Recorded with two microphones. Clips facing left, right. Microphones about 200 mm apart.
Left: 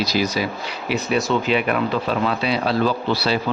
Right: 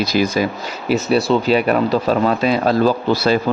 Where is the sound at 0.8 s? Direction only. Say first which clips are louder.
Right 5 dB; 40° right (ahead or behind).